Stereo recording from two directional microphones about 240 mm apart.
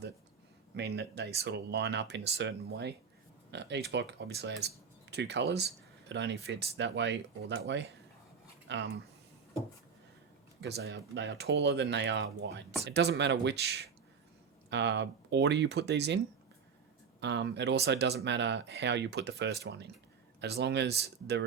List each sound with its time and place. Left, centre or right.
0.8 s speech: right
10.6 s speech: right